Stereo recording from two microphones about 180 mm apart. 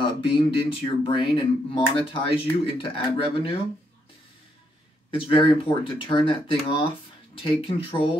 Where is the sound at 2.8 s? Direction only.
30° left (ahead or behind).